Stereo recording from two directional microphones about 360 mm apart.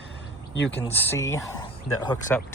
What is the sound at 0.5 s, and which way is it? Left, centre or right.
Speech, left.